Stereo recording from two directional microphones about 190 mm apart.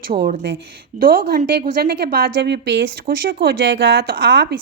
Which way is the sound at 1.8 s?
50° right (ahead or behind).